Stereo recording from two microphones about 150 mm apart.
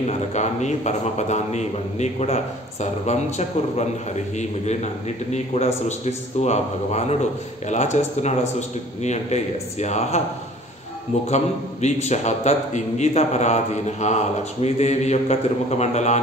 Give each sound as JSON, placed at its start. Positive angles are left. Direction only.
{"t": 0.3, "sound": "a man's voice", "side_deg": 50}
{"t": 11.2, "sound": "a man's voice", "side_deg": 50}